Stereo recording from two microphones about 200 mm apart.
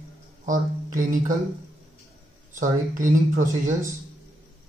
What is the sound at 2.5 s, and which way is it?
Speech, 40° right (ahead or behind).